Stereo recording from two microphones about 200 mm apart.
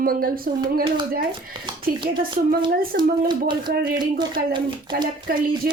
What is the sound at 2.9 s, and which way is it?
Speech, 50° right (ahead or behind).